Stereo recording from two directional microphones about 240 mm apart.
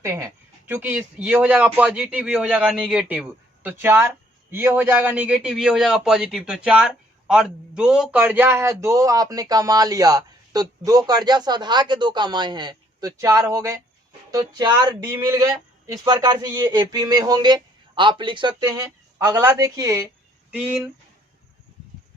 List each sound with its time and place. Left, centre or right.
0.0 s a man's voice: centre